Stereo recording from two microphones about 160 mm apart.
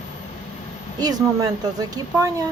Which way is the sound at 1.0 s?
25° right (ahead or behind).